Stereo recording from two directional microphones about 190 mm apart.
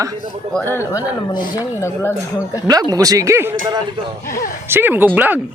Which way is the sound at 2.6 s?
20° right (ahead or behind).